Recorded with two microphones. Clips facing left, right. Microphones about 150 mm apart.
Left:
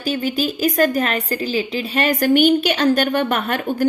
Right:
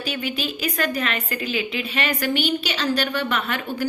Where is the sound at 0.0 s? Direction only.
40° left (ahead or behind).